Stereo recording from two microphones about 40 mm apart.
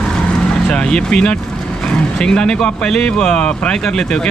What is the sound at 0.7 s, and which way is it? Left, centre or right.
Speech, left.